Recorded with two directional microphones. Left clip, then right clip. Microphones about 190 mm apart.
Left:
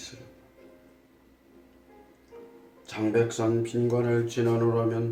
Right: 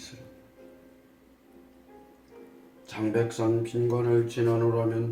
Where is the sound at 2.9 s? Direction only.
10° left (ahead or behind).